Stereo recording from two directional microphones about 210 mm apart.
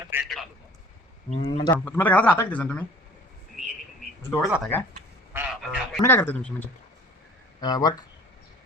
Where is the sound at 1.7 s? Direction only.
10° left (ahead or behind).